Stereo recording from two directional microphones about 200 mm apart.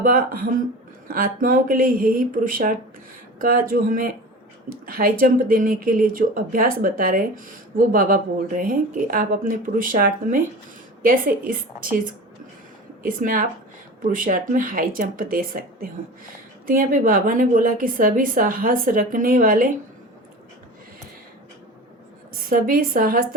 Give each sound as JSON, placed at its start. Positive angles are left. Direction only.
{"t": 0.0, "sound": "speech", "side_deg": -45}
{"t": 22.3, "sound": "a woman's voice", "side_deg": -45}